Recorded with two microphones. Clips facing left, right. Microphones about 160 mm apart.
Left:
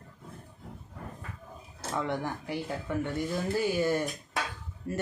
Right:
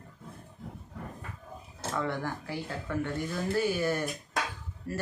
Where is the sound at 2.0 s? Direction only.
15° left (ahead or behind).